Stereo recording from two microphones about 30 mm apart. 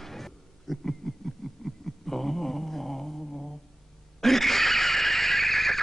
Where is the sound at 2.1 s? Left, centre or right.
Centre.